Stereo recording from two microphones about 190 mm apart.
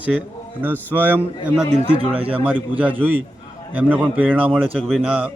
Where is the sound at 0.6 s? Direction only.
10° right (ahead or behind).